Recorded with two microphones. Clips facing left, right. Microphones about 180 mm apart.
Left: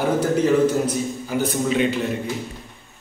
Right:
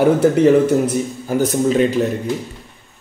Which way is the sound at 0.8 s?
45° right (ahead or behind).